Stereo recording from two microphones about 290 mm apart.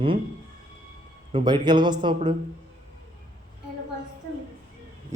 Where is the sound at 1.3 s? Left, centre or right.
Centre.